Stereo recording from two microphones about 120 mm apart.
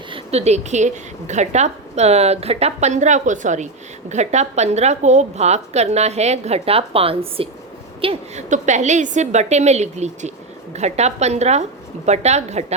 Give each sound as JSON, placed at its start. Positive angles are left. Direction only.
{"t": 0.1, "sound": "a woman's voice", "side_deg": -60}
{"t": 4.1, "sound": "a woman's voice", "side_deg": -70}
{"t": 8.4, "sound": "a woman's voice", "side_deg": -90}